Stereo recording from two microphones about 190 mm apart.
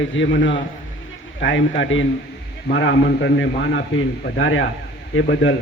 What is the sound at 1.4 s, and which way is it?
Speech, 80° left.